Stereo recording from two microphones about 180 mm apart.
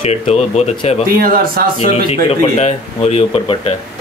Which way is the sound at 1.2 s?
50° right (ahead or behind).